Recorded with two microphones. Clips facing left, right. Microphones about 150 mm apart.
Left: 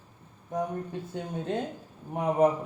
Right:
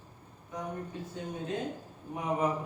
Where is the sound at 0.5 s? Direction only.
50° left (ahead or behind).